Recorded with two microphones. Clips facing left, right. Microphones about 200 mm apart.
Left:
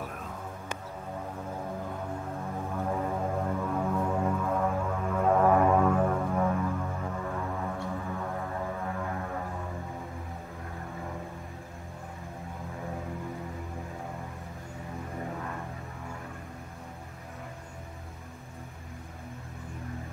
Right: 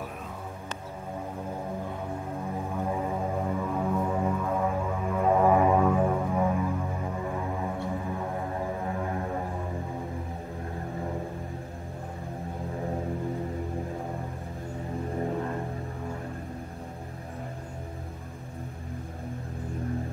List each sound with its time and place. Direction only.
2.5 s music: 10° right (ahead or behind); by 9.5 s 25° right (ahead or behind)
15.1 s music: 35° right (ahead or behind)